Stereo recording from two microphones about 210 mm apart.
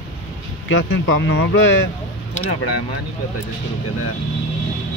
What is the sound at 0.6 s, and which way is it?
Speech, 65° left (ahead or behind).